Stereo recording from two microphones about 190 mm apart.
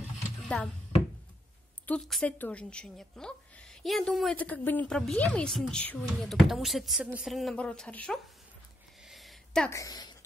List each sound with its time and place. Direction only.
0.5 s a woman's voice: 5° left (ahead or behind)
1.9 s a woman's voice: centre (ahead or behind)
9.0 s a sound: centre (ahead or behind)
9.7 s a woman's voice: 20° left (ahead or behind)